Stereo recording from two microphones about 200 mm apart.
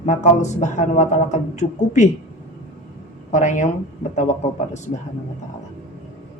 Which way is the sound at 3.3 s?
35° left (ahead or behind).